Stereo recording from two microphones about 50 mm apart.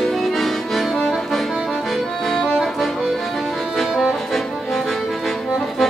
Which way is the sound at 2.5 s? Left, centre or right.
Centre.